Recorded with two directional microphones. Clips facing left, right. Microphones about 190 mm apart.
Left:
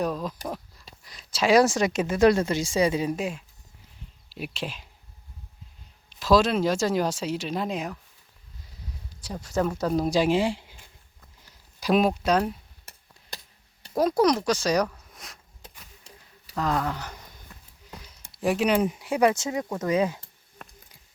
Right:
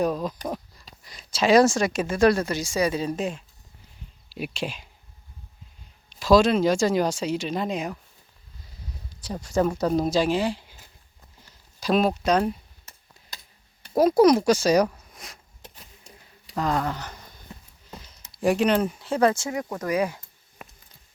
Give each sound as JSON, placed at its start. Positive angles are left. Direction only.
{"t": 0.0, "sound": "speech", "side_deg": 0}
{"t": 6.1, "sound": "speech", "side_deg": 0}
{"t": 9.4, "sound": "speech", "side_deg": 0}
{"t": 10.1, "sound": "speech", "side_deg": 20}
{"t": 11.8, "sound": "speech", "side_deg": 15}
{"t": 14.2, "sound": "speech", "side_deg": -10}
{"t": 15.1, "sound": "a sound", "side_deg": 0}
{"t": 16.6, "sound": "speech", "side_deg": 0}
{"t": 17.5, "sound": "a sound", "side_deg": -25}
{"t": 18.3, "sound": "speech", "side_deg": 5}
{"t": 20.6, "sound": "a sound", "side_deg": -5}